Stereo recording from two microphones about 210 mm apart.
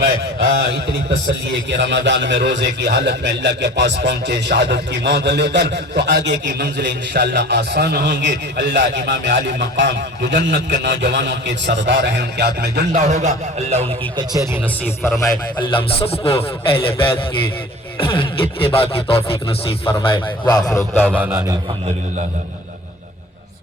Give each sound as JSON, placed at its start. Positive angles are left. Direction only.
{"t": 1.7, "sound": "a man's voice", "side_deg": -55}
{"t": 13.0, "sound": "a man's voice", "side_deg": -35}
{"t": 15.2, "sound": "a sound", "side_deg": 25}
{"t": 20.1, "sound": "a man's voice", "side_deg": 20}
{"t": 21.2, "sound": "a man's voice", "side_deg": -10}